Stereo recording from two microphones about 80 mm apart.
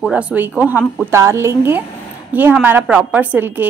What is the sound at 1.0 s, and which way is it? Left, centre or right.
Speech, right.